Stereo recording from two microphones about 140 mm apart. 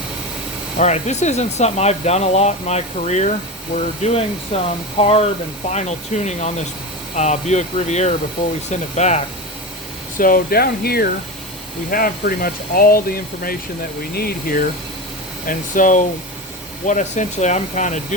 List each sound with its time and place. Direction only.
0.8 s speech: 55° left (ahead or behind)
10.2 s speech: 85° left
15.4 s speech: 70° left (ahead or behind)